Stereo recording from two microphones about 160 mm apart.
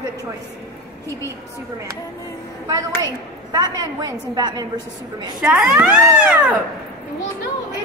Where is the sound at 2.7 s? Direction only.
20° right (ahead or behind).